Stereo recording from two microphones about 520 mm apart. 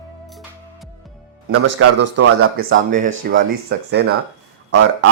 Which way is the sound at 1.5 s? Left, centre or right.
Right.